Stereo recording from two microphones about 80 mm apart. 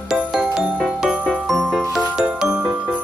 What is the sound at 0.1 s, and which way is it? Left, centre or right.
Music, centre.